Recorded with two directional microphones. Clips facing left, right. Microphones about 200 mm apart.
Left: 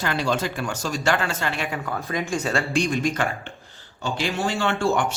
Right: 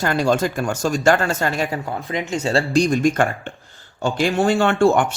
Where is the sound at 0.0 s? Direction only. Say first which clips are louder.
Right 6 dB; 45° right (ahead or behind).